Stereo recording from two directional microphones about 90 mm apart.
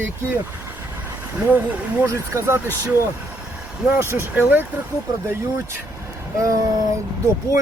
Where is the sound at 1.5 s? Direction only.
20° right (ahead or behind).